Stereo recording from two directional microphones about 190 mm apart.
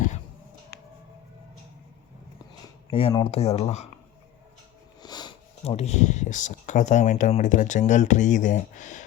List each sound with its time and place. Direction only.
0.7 s music: 55° left (ahead or behind)
2.9 s speech: 25° left (ahead or behind)
5.0 s sniff: 20° left (ahead or behind)
5.6 s speech: 35° left (ahead or behind)